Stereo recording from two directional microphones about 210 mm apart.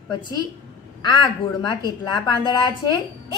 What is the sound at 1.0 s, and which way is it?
A woman's voice, 20° left (ahead or behind).